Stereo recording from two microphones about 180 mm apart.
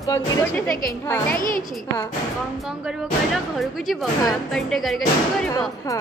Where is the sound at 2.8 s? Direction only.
Centre (ahead or behind).